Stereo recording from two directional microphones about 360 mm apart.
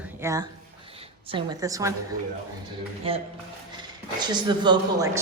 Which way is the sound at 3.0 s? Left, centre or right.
Centre.